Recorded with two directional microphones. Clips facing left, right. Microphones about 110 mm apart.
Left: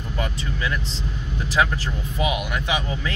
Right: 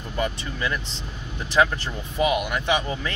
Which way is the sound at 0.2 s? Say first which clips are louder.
Right 2 dB; centre (ahead or behind).